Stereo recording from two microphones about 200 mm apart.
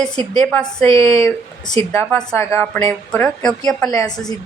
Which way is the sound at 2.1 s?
5° left (ahead or behind).